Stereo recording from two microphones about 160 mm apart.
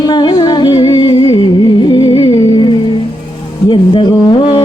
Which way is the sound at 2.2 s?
25° left (ahead or behind).